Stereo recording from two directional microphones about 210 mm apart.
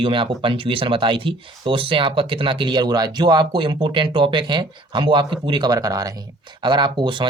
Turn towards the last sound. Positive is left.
turn(degrees=-20)  # may be behind; listen again after turning